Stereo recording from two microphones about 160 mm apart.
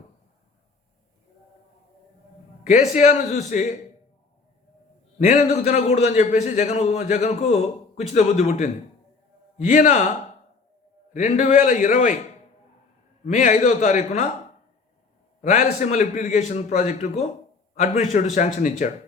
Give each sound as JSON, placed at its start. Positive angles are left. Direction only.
{"t": 2.6, "sound": "a man's voice", "side_deg": 45}
{"t": 5.2, "sound": "a man's voice", "side_deg": 45}
{"t": 13.2, "sound": "a man's voice", "side_deg": 50}
{"t": 15.4, "sound": "a man's voice", "side_deg": 50}